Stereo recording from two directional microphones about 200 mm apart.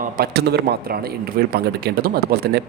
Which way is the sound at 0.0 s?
50° right (ahead or behind).